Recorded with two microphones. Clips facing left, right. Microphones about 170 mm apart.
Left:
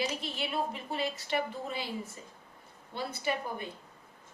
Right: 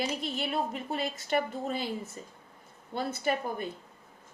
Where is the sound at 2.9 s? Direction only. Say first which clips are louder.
Right 3 dB; 50° right (ahead or behind).